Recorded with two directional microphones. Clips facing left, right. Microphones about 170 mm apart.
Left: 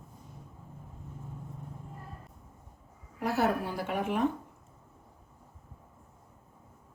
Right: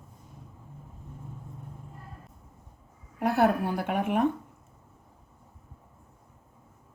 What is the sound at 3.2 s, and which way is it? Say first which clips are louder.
A woman's voice: right 5 dB; 55° right (ahead or behind).